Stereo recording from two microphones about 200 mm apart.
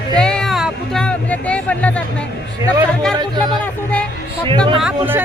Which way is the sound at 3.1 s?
20° right (ahead or behind).